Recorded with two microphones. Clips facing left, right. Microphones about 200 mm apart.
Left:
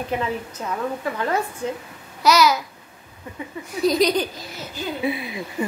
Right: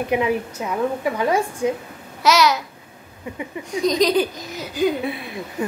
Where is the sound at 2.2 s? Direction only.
Centre (ahead or behind).